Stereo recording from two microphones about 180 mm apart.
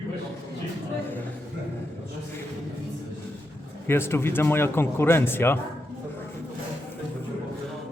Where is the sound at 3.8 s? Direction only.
15° left (ahead or behind).